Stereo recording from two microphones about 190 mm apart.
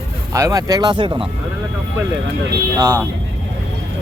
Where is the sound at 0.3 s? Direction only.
15° right (ahead or behind).